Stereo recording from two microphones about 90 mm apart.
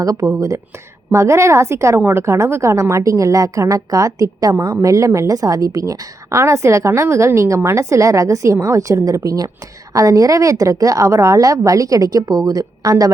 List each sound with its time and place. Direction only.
0.0 s a woman's voice: 35° right (ahead or behind)